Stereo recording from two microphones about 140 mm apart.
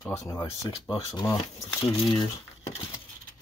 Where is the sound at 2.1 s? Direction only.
35° left (ahead or behind).